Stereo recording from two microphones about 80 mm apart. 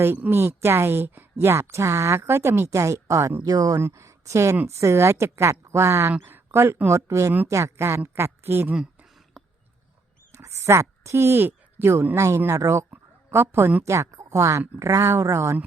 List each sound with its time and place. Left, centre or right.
0.3 s a woman's voice: right
3.4 s speech: right
3.8 s a woman's voice: right
8.7 s a sound: centre
10.3 s a sound: right
12.1 s a woman's voice: right